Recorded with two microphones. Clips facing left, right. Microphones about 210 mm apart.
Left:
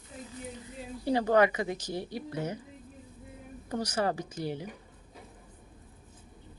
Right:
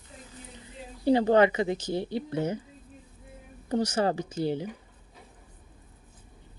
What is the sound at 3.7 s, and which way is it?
Speech, 25° right (ahead or behind).